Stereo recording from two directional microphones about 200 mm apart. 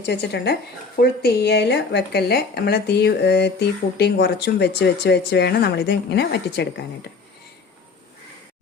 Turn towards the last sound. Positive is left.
turn(degrees=55)  # may be behind; listen again after turning